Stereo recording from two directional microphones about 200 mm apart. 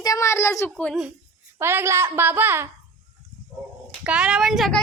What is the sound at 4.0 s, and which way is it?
Speech, 5° right (ahead or behind).